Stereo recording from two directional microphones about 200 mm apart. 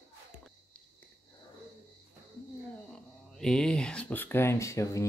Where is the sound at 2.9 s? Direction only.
Centre (ahead or behind).